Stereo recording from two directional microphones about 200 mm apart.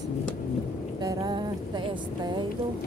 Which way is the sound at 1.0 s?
20° right (ahead or behind).